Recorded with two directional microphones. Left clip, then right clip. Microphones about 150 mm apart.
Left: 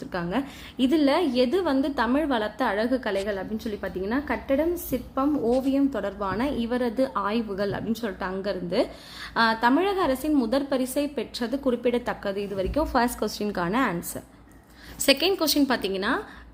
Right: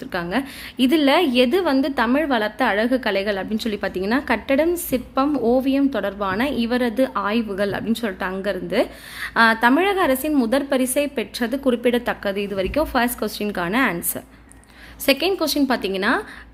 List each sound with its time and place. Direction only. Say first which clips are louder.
0.0 s a woman's voice: right 5 dB; centre (ahead or behind); by 5.7 s 20° right (ahead or behind)
5.7 s a woman's voice: right 5 dB; 10° right (ahead or behind)
12.8 s a woman's voice: right 2 dB; 5° left (ahead or behind)
15.0 s a woman's voice: right 3 dB; 10° right (ahead or behind)